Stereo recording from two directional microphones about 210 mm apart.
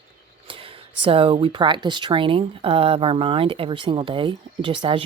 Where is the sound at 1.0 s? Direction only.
25° right (ahead or behind).